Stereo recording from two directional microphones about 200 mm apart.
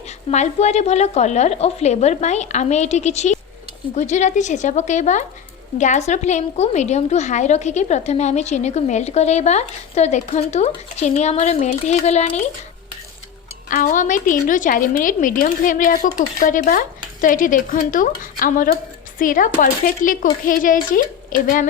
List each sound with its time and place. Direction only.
0.3 s a woman's voice: 35° left (ahead or behind)
13.7 s a woman's voice: 45° left (ahead or behind)